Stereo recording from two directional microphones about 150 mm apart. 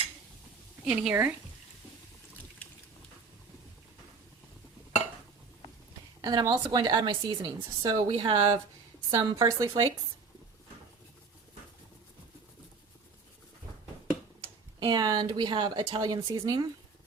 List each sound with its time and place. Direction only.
0.9 s speech: 10° right (ahead or behind)
6.2 s speech: 25° right (ahead or behind)
14.8 s speech: 30° right (ahead or behind)